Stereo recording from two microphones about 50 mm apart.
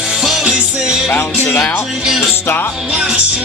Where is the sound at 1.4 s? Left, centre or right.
Left.